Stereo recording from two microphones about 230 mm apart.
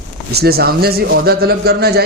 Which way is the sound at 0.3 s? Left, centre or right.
Right.